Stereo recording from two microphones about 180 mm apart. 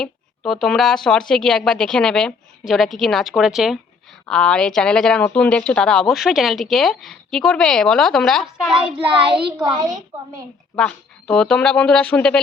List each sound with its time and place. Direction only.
0.0 s speech: centre (ahead or behind)
9.0 s a child's voice: 30° right (ahead or behind)
10.8 s speech: 5° left (ahead or behind)